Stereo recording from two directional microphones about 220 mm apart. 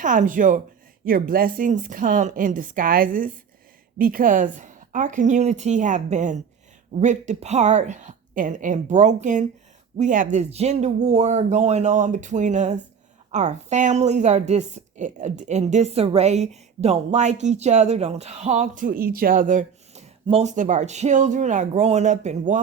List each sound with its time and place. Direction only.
0.0 s a woman's voice: 35° right (ahead or behind)